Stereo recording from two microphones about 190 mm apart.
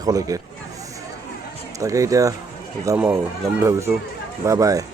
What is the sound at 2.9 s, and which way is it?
Speech, 5° right (ahead or behind).